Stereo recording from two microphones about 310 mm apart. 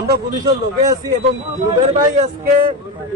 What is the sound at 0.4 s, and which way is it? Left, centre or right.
A man's voice, centre.